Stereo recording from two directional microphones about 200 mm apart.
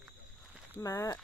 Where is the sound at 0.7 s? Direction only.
15° left (ahead or behind).